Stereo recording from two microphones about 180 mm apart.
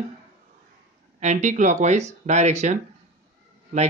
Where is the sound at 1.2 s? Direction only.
40° right (ahead or behind).